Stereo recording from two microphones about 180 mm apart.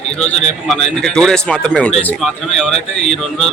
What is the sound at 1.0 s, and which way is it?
Speech, 5° left (ahead or behind).